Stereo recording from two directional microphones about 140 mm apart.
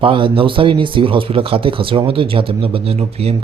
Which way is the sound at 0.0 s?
40° right (ahead or behind).